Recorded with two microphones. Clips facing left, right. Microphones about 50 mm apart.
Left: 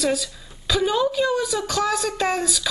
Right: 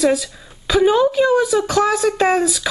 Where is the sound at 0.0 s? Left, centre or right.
Centre.